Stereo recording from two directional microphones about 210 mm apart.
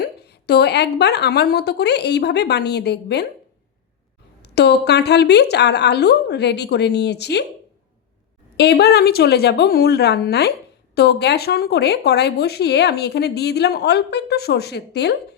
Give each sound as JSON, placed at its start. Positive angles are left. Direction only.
{"t": 0.0, "sound": "speech", "side_deg": 50}
{"t": 4.4, "sound": "speech", "side_deg": 50}
{"t": 8.5, "sound": "speech", "side_deg": 50}